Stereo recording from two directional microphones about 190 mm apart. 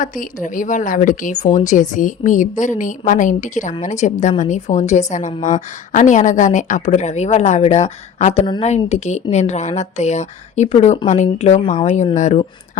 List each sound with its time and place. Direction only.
0.0 s a woman's voice: 45° left (ahead or behind)